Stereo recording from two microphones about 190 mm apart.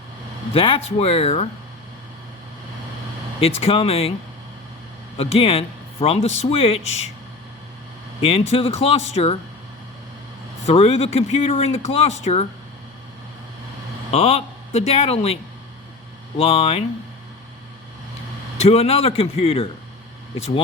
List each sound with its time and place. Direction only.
0.5 s speech: 30° left (ahead or behind)
3.4 s speech: 30° left (ahead or behind)
5.1 s speech: 30° left (ahead or behind)
8.2 s speech: 30° left (ahead or behind)
10.7 s speech: 35° left (ahead or behind)
14.1 s speech: 30° left (ahead or behind)
16.4 s speech: 30° left (ahead or behind)
18.5 s speech: 35° left (ahead or behind)